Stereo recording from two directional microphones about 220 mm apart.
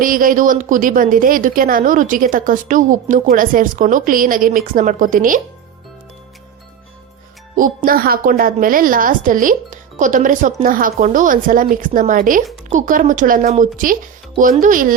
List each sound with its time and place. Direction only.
0.0 s a woman's voice: 40° right (ahead or behind)
7.9 s a woman's voice: 40° right (ahead or behind)